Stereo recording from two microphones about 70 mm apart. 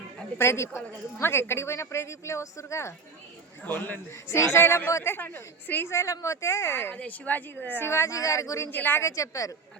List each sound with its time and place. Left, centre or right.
0.3 s speech: left
3.6 s a woman's voice: left
4.1 s speech: left
5.9 s speech: left
6.9 s a woman's voice: left
7.9 s speech: left
8.7 s a woman's voice: left
9.0 s speech: left